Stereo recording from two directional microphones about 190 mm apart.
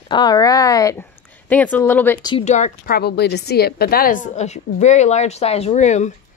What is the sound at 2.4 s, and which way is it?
A woman's voice, 40° left (ahead or behind).